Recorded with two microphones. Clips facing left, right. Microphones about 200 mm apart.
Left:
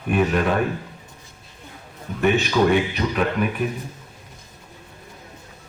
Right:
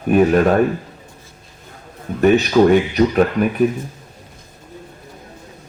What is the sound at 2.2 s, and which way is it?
Speech, 40° right (ahead or behind).